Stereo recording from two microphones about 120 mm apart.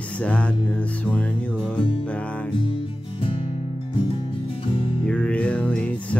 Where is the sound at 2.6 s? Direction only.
45° left (ahead or behind).